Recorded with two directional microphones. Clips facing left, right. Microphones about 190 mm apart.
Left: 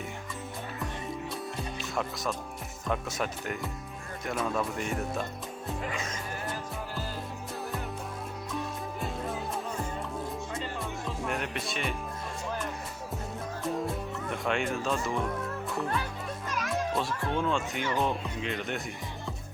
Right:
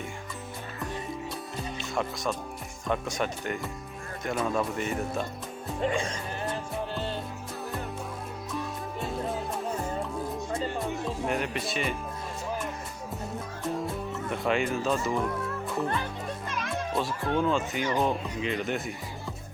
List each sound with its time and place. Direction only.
1.8 s speech: centre (ahead or behind)
5.8 s speech: 30° right (ahead or behind)
6.9 s music: 25° right (ahead or behind)
11.3 s speech: centre (ahead or behind)
14.3 s a child's voice: centre (ahead or behind)